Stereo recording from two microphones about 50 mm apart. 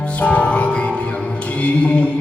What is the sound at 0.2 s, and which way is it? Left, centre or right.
Music, left.